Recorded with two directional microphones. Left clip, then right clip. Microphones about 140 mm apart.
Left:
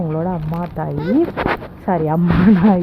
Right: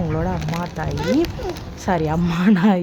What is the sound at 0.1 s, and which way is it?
Speech, 20° right (ahead or behind).